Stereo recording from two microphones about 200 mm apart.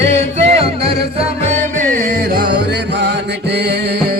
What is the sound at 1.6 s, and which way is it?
Music, 40° right (ahead or behind).